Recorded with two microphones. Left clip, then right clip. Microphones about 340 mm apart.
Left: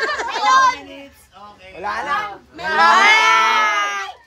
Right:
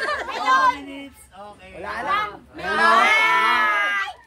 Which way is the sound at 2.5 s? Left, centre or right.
Left.